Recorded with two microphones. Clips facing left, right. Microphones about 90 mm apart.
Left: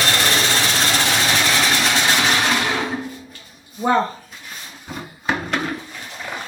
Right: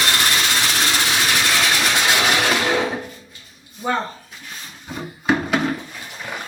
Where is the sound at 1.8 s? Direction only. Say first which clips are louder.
Even; 10° right (ahead or behind).